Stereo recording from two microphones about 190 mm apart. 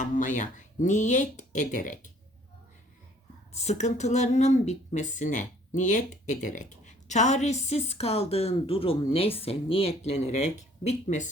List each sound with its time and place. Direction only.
0.0 s speech: 40° left (ahead or behind)
3.5 s speech: 35° left (ahead or behind)